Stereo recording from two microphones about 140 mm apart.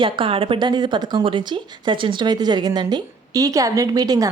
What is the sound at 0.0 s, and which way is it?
A woman's voice, 40° right (ahead or behind).